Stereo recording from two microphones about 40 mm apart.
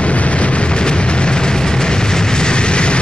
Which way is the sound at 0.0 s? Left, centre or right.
Left.